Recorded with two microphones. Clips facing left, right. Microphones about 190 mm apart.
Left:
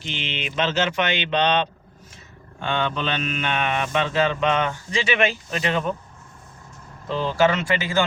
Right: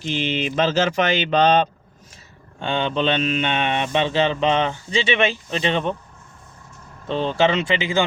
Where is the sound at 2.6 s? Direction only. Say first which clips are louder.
Right 3 dB; 30° right (ahead or behind).